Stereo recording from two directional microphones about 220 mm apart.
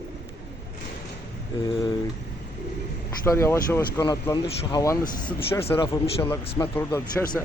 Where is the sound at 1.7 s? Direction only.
25° left (ahead or behind).